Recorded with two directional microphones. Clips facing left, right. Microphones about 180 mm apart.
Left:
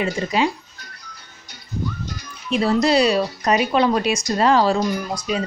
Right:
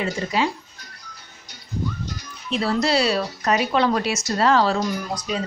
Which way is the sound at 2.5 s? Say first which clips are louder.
Left 4 dB; 15° left (ahead or behind).